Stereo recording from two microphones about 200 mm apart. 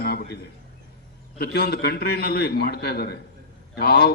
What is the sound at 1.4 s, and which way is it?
A man's voice, 50° left (ahead or behind).